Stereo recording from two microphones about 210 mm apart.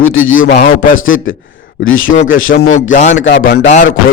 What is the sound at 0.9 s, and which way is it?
A man's voice, 70° left (ahead or behind).